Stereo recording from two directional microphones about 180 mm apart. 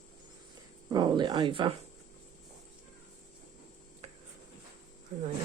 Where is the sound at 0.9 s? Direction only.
25° right (ahead or behind).